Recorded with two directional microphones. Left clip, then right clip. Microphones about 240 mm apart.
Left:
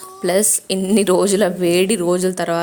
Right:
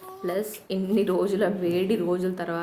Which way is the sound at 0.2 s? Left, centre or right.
Left.